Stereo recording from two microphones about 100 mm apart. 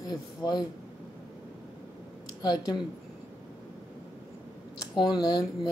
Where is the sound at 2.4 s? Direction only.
40° left (ahead or behind).